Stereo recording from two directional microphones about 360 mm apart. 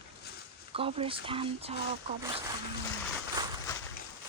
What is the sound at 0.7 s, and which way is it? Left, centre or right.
Speech, centre.